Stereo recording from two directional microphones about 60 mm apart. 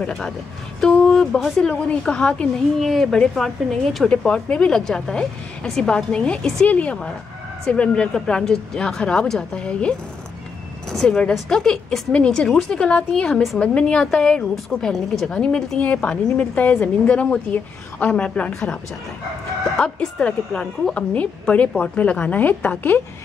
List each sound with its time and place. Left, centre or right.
0.7 s speech: centre
1.7 s a woman's voice: centre
2.8 s a woman's voice: centre
10.9 s a woman's voice: centre
19.8 s a woman's voice: centre